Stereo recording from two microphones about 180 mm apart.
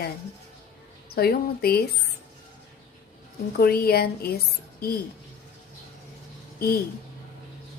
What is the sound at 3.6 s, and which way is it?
Speech, 60° left (ahead or behind).